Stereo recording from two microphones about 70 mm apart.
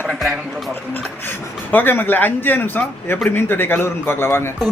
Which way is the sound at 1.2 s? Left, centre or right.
Left.